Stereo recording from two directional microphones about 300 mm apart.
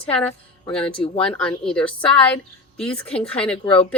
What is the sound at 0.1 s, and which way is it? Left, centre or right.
A woman's voice, centre.